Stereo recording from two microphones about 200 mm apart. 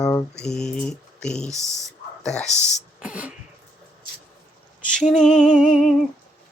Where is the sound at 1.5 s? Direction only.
15° right (ahead or behind).